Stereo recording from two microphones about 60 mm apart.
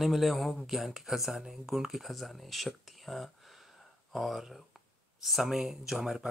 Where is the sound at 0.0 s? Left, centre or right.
Centre.